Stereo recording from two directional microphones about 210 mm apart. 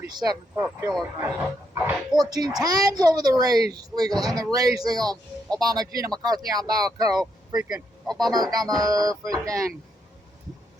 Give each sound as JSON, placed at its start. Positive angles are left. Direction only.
{"t": 0.0, "sound": "speech", "side_deg": -20}
{"t": 7.2, "sound": "speech", "side_deg": -5}
{"t": 8.2, "sound": "speech", "side_deg": -20}